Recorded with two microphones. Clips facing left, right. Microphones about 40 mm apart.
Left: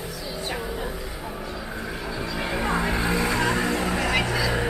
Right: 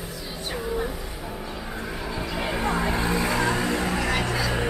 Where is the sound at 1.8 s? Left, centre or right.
Centre.